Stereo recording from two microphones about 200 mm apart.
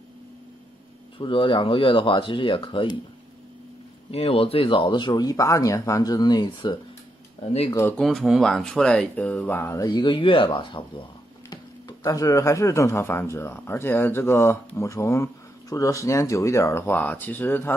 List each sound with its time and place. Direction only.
1.1 s speech: 25° left (ahead or behind)
4.1 s speech: 30° left (ahead or behind)
8.0 s speech: centre (ahead or behind)